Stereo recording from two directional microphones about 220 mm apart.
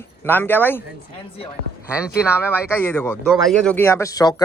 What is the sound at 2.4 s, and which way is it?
Speech, 10° left (ahead or behind).